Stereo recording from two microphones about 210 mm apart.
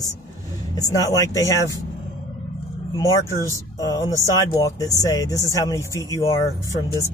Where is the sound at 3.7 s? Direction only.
20° left (ahead or behind).